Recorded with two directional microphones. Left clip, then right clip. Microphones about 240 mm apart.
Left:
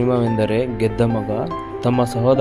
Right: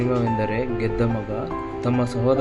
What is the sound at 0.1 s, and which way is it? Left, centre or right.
Speech, centre.